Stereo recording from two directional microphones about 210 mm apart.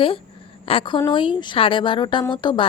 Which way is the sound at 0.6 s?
25° left (ahead or behind).